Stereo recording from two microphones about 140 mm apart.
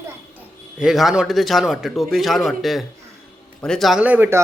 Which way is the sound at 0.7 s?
5° right (ahead or behind).